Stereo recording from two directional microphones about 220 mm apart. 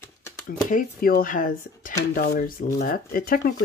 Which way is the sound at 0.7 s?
40° left (ahead or behind).